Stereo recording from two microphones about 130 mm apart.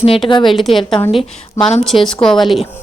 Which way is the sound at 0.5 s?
Centre (ahead or behind).